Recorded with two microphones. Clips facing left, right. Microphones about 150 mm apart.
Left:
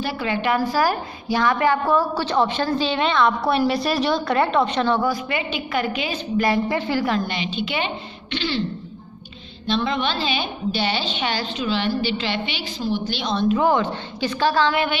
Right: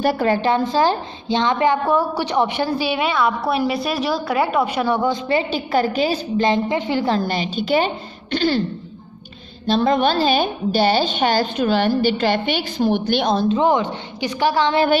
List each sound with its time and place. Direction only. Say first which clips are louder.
0.0 s a woman's voice: right 7 dB; 45° right (ahead or behind)
0.5 s a woman's voice: left 1 dB; 20° right (ahead or behind)
5.3 s a woman's voice: right 6 dB; 35° right (ahead or behind)
6.4 s a woman's voice: right 2 dB; 20° right (ahead or behind)
7.1 s a woman's voice: right 3 dB; 35° right (ahead or behind)
9.7 s a woman's voice: right 6 dB; 45° right (ahead or behind)
13.4 s a woman's voice: right 2 dB; 25° right (ahead or behind)